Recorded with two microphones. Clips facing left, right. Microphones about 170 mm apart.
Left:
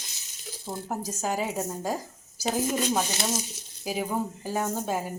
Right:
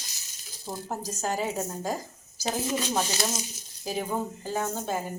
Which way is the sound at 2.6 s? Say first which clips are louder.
Left 2 dB; 45° left (ahead or behind).